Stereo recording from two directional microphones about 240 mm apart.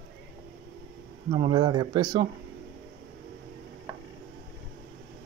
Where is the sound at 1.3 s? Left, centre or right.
Centre.